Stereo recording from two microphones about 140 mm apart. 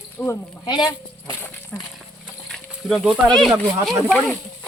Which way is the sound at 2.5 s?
Centre (ahead or behind).